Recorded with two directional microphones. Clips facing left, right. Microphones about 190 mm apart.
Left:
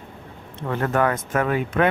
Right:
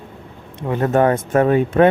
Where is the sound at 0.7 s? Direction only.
25° right (ahead or behind).